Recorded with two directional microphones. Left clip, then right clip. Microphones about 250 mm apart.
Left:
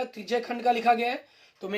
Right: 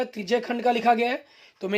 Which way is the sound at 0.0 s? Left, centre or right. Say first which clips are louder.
Right 4 dB; right.